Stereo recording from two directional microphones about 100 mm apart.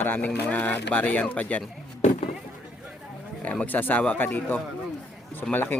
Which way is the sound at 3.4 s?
15° left (ahead or behind).